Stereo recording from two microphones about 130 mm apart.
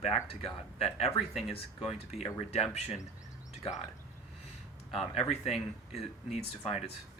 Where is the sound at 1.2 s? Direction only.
Centre (ahead or behind).